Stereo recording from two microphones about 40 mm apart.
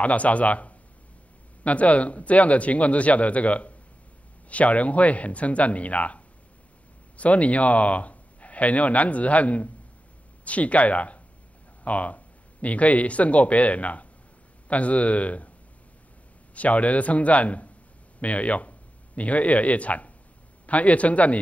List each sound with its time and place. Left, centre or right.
0.0 s speech: left
16.5 s speech: left